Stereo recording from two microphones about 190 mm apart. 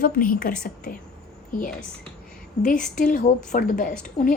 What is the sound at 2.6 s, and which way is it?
A woman's voice, 40° left (ahead or behind).